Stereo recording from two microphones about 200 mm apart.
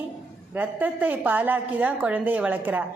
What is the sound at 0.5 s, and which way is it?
A woman's voice, 10° right (ahead or behind).